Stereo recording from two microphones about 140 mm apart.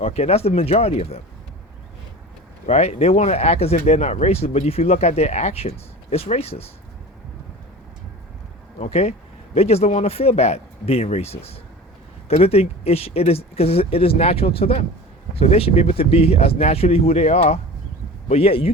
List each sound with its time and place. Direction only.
0.0 s speech: 50° left (ahead or behind)
2.6 s speech: 50° left (ahead or behind)
8.8 s speech: 50° left (ahead or behind)